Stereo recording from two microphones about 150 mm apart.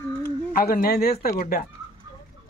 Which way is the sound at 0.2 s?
70° left (ahead or behind).